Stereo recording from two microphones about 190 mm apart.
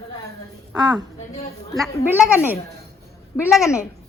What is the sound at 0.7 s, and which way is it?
Speech, 20° right (ahead or behind).